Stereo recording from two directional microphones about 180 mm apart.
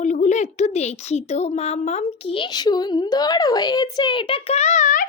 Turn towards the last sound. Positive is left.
turn(degrees=45)  # may be behind; listen again after turning